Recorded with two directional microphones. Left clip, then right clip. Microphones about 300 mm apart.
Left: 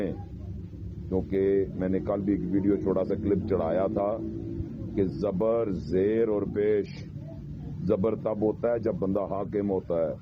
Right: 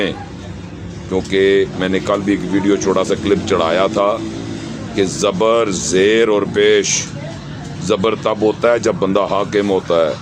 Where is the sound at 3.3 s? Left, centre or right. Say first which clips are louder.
Right 12 dB; centre.